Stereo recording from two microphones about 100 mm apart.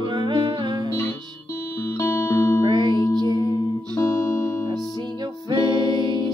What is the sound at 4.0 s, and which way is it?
Music, 30° left (ahead or behind).